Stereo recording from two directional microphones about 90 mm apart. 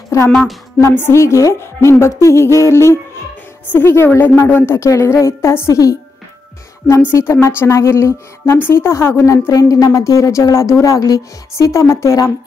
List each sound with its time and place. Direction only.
0.3 s a woman's voice: centre (ahead or behind)
0.7 s a woman's voice: 25° left (ahead or behind)
7.1 s a woman's voice: 25° left (ahead or behind)